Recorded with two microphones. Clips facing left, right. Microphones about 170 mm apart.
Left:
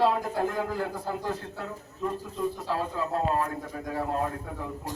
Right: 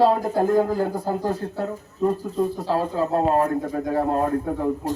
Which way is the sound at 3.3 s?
50° right (ahead or behind).